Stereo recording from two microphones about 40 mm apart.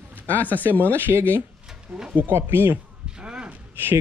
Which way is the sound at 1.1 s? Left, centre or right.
Right.